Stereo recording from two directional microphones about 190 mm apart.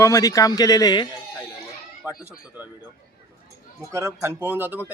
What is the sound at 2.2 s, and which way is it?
Speech, 10° right (ahead or behind).